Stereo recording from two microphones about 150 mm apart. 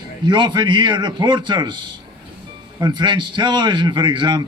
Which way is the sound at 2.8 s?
30° right (ahead or behind).